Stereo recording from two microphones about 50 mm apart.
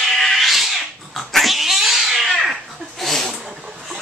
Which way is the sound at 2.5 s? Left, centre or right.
Centre.